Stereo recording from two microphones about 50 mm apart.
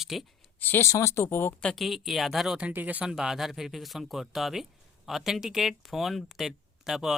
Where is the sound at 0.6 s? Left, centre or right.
Left.